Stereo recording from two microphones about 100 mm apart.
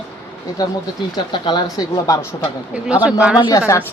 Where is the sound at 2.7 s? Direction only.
10° right (ahead or behind).